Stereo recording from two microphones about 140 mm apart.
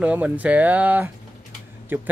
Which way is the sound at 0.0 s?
10° right (ahead or behind).